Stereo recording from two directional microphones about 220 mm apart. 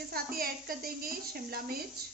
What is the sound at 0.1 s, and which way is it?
A woman's voice, 40° right (ahead or behind).